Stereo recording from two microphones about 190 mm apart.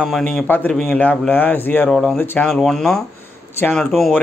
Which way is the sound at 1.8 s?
Centre (ahead or behind).